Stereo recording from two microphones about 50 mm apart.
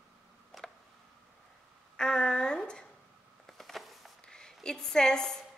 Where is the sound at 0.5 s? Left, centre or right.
Centre.